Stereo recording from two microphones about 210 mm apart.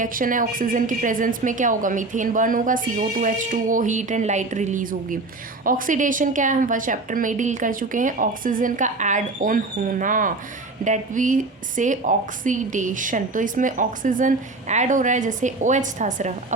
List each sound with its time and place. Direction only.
0.0 s a woman's voice: 40° right (ahead or behind)